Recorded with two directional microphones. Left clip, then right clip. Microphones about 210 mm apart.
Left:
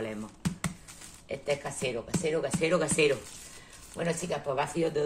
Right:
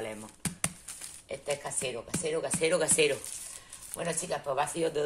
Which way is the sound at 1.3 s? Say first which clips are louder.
Left 2 dB; 20° right (ahead or behind).